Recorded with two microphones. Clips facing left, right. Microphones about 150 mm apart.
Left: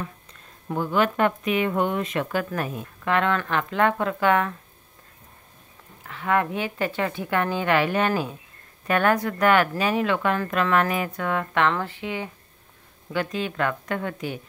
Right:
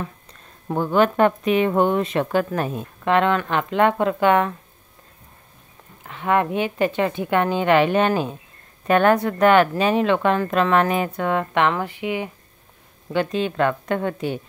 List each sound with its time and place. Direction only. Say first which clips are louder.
0.9 s speech: right 5 dB; 35° right (ahead or behind)
6.0 s speech: right 3 dB; 20° right (ahead or behind)
13.1 s speech: right 5 dB; 25° right (ahead or behind)